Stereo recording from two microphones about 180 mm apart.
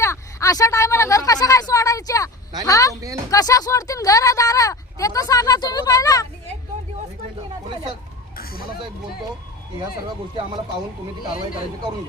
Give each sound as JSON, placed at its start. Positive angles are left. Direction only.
{"t": 0.0, "sound": "speech", "side_deg": 15}
{"t": 2.9, "sound": "speech", "side_deg": -20}
{"t": 3.2, "sound": "speech", "side_deg": 20}
{"t": 11.2, "sound": "speech", "side_deg": 50}